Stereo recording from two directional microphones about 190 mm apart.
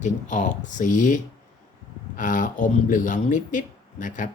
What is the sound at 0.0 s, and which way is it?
Speech, 40° left (ahead or behind).